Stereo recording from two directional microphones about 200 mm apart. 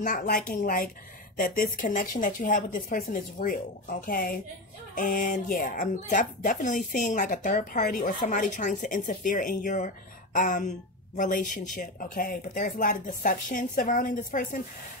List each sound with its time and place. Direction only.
0.0 s speech: 45° left (ahead or behind)